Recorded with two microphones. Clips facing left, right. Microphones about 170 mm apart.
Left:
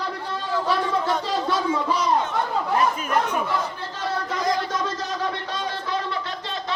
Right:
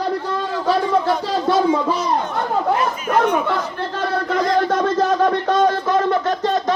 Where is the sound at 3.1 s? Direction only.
60° right (ahead or behind).